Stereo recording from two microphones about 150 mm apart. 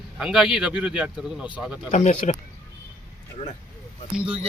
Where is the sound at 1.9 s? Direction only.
55° left (ahead or behind).